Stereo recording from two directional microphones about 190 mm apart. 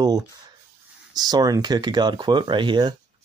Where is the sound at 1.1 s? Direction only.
20° right (ahead or behind).